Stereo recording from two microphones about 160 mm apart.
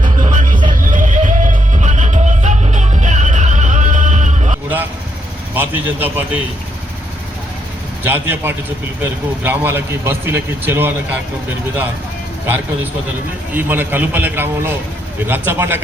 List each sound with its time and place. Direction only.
0.0 s music: 50° right (ahead or behind)
5.5 s speech: 10° right (ahead or behind)
8.0 s speech: 15° right (ahead or behind)
13.5 s speech: 10° right (ahead or behind)